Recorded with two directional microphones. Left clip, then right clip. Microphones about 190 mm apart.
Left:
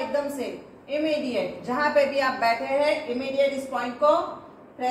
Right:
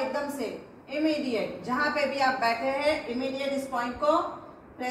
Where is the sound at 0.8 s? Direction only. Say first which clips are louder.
Left 3 dB; 15° left (ahead or behind).